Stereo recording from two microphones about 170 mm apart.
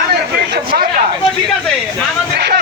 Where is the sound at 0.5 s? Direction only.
60° right (ahead or behind).